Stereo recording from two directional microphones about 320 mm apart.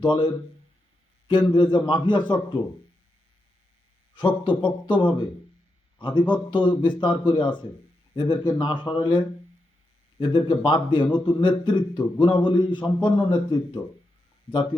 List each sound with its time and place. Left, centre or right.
0.0 s a man's voice: centre
1.3 s a man's voice: centre
4.4 s a man's voice: centre